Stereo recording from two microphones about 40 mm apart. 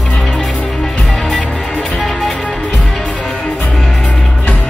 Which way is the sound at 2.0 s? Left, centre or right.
Centre.